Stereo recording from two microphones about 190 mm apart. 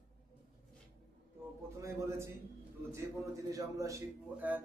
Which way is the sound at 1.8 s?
15° right (ahead or behind).